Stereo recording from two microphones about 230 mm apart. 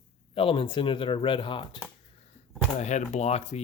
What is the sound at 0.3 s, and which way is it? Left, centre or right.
Speech, left.